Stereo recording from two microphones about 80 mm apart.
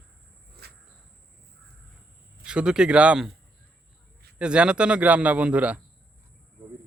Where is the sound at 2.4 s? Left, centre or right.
Centre.